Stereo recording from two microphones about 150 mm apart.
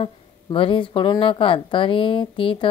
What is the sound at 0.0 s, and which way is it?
A woman's voice, 35° left (ahead or behind).